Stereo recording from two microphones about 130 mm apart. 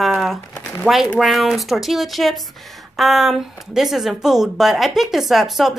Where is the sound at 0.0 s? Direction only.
Centre (ahead or behind).